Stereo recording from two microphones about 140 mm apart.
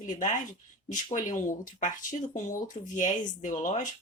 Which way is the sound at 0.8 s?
65° left (ahead or behind).